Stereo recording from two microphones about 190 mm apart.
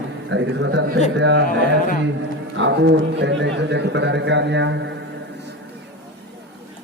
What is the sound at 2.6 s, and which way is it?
A man's voice, 70° right (ahead or behind).